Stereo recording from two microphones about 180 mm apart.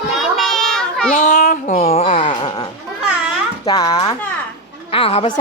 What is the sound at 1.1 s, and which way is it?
Babbling, 45° left (ahead or behind).